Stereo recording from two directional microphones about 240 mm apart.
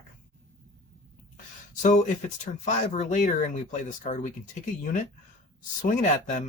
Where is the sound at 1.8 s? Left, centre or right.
Left.